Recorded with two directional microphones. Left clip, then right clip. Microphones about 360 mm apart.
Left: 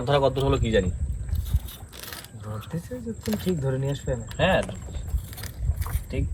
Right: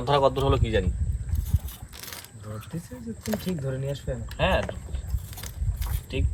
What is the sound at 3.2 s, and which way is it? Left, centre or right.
Speech, centre.